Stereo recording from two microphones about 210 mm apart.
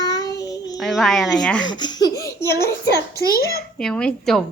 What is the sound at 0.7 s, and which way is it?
Speech, centre (ahead or behind).